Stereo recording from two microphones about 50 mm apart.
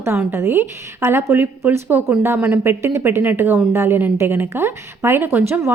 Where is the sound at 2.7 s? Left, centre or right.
Right.